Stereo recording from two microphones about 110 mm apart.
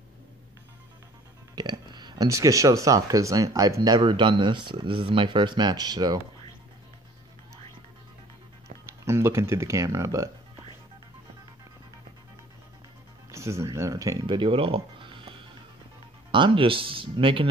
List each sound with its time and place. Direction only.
1.5 s music: 40° right (ahead or behind)
2.2 s speech: 30° right (ahead or behind)
8.8 s speech: 25° right (ahead or behind)
13.3 s speech: 25° right (ahead or behind)
14.2 s speech: 50° right (ahead or behind)